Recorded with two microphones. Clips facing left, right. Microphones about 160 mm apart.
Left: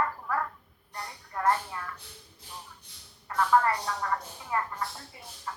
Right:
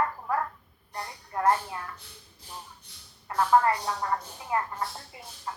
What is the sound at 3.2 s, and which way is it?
Speech, 20° right (ahead or behind).